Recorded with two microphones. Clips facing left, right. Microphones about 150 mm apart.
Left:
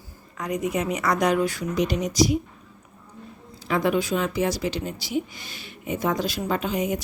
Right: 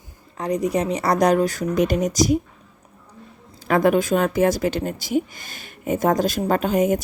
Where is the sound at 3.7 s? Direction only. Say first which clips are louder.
Right 5 dB; 50° right (ahead or behind).